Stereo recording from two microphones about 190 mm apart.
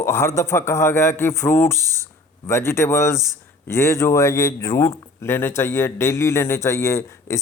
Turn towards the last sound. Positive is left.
turn(degrees=15)  # may be behind; listen again after turning